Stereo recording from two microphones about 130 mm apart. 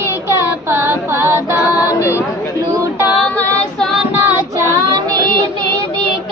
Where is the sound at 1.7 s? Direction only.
25° left (ahead or behind).